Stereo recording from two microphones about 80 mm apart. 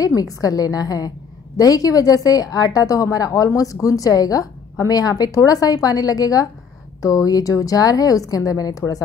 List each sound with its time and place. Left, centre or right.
0.0 s a woman's voice: left